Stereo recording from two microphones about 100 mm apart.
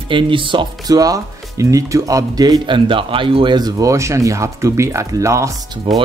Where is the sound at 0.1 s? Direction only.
55° right (ahead or behind).